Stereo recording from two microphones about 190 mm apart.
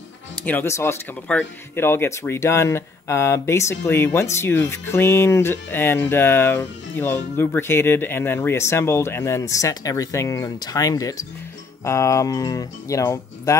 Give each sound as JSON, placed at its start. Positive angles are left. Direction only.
{"t": 0.5, "sound": "speech", "side_deg": 10}